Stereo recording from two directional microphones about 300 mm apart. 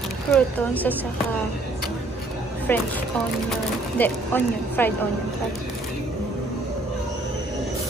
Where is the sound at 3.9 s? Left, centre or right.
Centre.